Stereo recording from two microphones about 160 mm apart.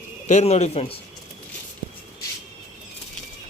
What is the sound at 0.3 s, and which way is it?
Speech, 45° left (ahead or behind).